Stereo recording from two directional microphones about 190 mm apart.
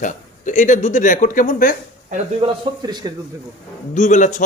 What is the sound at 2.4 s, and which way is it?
Speech, 20° right (ahead or behind).